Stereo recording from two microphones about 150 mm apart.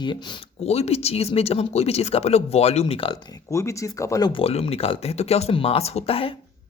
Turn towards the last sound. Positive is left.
turn(degrees=40)  # may be behind; listen again after turning